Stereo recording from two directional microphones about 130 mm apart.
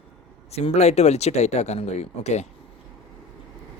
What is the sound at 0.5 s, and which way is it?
Speech, 55° left (ahead or behind).